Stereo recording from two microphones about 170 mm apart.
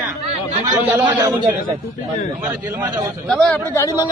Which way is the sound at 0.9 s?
10° right (ahead or behind).